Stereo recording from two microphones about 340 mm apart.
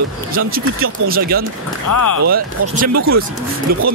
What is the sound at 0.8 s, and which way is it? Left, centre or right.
Speech, right.